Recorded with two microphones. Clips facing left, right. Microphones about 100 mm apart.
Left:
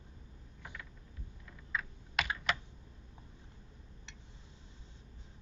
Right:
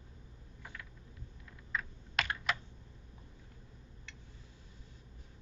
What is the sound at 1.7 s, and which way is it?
Computer keyboard, centre (ahead or behind).